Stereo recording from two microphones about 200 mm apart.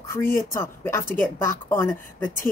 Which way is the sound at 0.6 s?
10° left (ahead or behind).